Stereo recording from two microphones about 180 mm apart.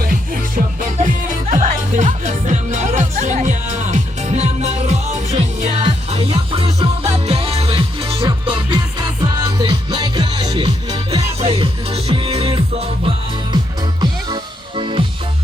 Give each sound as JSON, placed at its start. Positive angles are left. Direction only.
{"t": 0.8, "sound": "music", "side_deg": -40}
{"t": 5.8, "sound": "music", "side_deg": -30}